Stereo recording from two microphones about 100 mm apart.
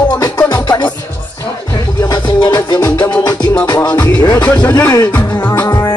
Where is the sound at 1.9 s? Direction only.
45° left (ahead or behind).